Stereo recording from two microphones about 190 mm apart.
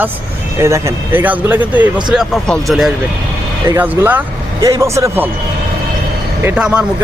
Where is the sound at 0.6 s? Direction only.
15° right (ahead or behind).